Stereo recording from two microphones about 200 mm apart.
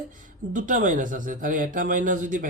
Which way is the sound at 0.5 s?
40° right (ahead or behind).